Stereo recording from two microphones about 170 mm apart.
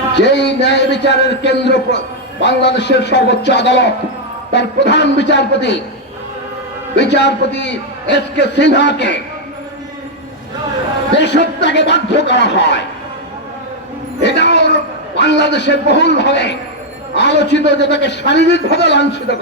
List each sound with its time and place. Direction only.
0.2 s a man's voice: 90° left
6.9 s a man's voice: 90° left
11.2 s a man's voice: 90° left
14.2 s a man's voice: 90° left